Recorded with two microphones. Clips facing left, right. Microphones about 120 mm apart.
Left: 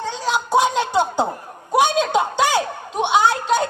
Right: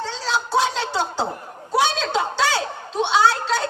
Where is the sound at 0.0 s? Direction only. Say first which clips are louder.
Left 2 dB; 15° left (ahead or behind).